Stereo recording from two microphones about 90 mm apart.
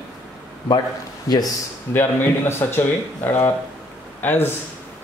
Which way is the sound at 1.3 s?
45° left (ahead or behind).